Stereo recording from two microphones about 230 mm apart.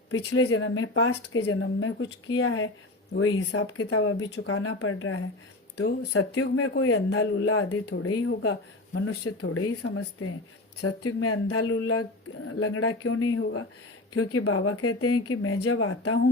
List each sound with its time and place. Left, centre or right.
0.1 s speech: left